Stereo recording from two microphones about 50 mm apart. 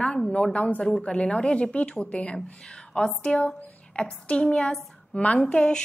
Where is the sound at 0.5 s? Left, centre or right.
Left.